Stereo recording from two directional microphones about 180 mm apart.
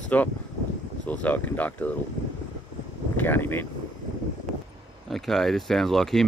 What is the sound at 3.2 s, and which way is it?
Speech, 10° left (ahead or behind).